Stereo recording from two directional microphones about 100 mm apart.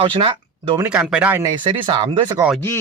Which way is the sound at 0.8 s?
20° right (ahead or behind).